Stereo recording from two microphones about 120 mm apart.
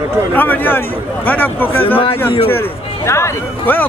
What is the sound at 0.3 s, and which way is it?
A man's voice, 15° left (ahead or behind).